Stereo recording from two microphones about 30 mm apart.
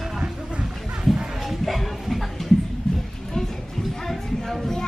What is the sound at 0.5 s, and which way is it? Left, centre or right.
Music, right.